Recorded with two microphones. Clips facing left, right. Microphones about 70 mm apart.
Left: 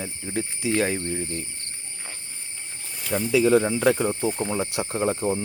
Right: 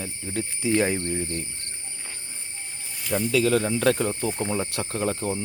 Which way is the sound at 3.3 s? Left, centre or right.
Centre.